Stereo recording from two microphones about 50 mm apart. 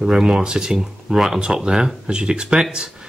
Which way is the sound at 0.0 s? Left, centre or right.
Centre.